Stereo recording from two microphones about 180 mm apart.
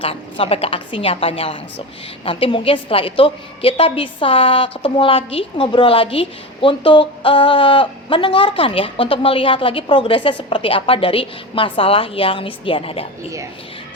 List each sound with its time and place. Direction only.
0.0 s a woman's voice: 30° left (ahead or behind)